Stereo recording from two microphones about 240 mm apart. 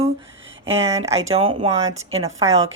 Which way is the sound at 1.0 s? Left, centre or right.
Right.